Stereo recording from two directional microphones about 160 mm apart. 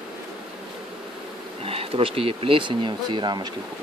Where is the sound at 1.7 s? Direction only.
35° right (ahead or behind).